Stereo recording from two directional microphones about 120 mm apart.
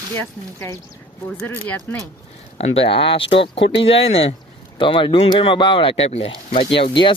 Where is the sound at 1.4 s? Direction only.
15° left (ahead or behind).